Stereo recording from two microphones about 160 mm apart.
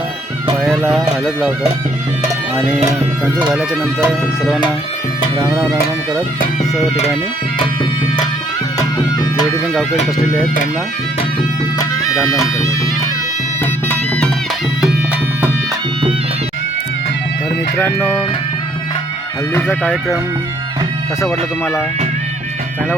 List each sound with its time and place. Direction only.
0.6 s speech: centre (ahead or behind)
3.5 s speech: centre (ahead or behind)
12.4 s speech: 20° left (ahead or behind)
17.7 s speech: 10° left (ahead or behind)
19.5 s speech: 10° left (ahead or behind)